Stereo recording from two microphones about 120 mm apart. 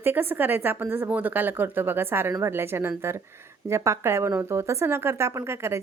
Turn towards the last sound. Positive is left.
turn(degrees=-20)  # may be behind; listen again after turning